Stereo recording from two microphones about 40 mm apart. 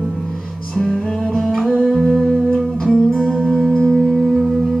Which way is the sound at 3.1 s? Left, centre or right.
Right.